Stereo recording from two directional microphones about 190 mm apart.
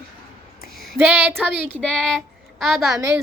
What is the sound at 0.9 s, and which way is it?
Child singing, 10° right (ahead or behind).